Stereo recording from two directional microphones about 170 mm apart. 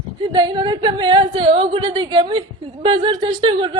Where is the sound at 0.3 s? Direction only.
25° right (ahead or behind).